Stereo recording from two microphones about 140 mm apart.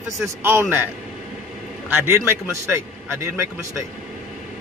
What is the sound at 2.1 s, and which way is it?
A man's voice, 20° right (ahead or behind).